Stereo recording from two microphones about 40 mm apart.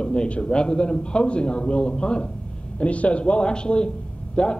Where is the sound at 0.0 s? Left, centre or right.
Left.